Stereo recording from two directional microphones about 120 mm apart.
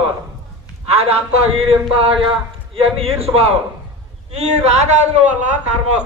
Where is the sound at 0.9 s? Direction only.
60° right (ahead or behind).